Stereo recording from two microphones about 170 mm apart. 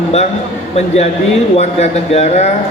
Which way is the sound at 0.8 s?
40° left (ahead or behind).